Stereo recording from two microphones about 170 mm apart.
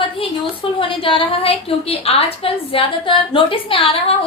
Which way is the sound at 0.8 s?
30° left (ahead or behind).